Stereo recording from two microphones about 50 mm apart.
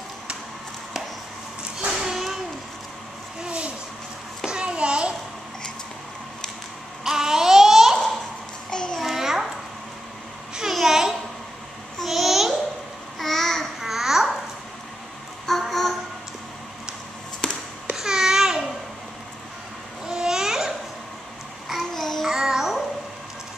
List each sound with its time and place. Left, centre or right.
1.9 s a sound: centre
3.4 s vehicle: right
4.5 s a sound: centre
7.1 s babbling: centre
8.6 s a sound: centre
9.0 s babbling: centre
10.7 s babbling: centre
13.7 s babbling: centre
15.4 s a sound: centre
17.9 s babbling: centre
20.1 s babbling: centre
21.9 s child singing: centre
22.2 s child singing: centre